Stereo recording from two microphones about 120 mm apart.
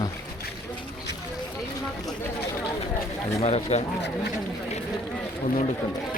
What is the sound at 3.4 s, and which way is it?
Speech, 65° left (ahead or behind).